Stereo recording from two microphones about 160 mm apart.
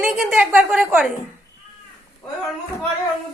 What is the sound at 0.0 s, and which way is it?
A woman's voice, 5° right (ahead or behind).